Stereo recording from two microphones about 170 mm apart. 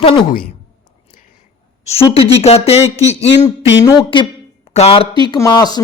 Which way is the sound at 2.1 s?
35° left (ahead or behind).